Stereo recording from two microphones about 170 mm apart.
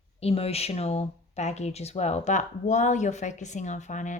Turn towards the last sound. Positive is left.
turn(degrees=45)  # may be behind; listen again after turning